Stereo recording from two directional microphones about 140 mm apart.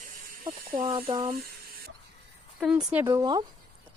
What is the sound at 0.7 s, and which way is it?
Speech, 30° right (ahead or behind).